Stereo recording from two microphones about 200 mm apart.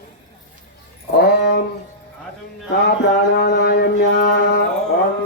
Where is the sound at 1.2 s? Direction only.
55° left (ahead or behind).